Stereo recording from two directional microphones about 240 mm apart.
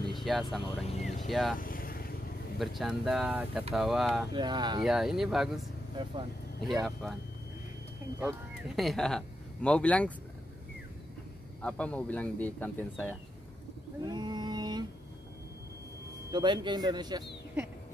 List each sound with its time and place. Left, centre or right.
0.1 s vehicle: centre
0.9 s vehicle: left
1.2 s speech: centre
1.6 s vehicle: left
2.6 s speech: centre
4.3 s speech: centre
4.8 s speech: centre
6.7 s speech: centre
8.2 s speech: centre
11.6 s speech: centre
14.0 s a sound: centre
16.3 s speech: centre